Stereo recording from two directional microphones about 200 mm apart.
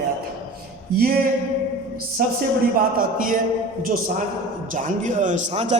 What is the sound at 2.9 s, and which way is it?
Speech, 45° right (ahead or behind).